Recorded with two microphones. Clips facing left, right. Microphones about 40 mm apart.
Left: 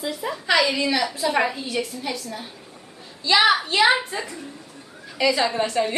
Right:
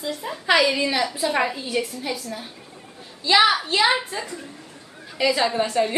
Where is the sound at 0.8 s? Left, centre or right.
Centre.